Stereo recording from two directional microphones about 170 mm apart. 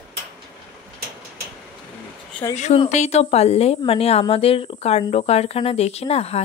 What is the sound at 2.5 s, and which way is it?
A woman's voice, 45° left (ahead or behind).